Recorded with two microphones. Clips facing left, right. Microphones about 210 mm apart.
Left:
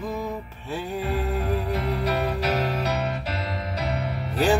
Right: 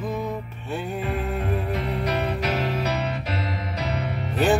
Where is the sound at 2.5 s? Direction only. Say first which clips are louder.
Even; 40° left (ahead or behind).